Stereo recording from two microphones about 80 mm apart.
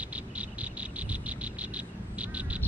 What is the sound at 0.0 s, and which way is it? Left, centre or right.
Frog, centre.